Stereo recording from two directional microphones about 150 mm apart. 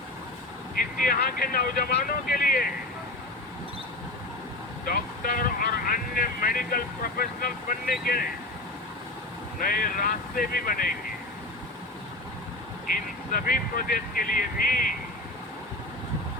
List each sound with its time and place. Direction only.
0.8 s speech: 70° left (ahead or behind)
4.9 s speech: 75° left (ahead or behind)
9.6 s speech: 70° left (ahead or behind)
12.9 s speech: 70° left (ahead or behind)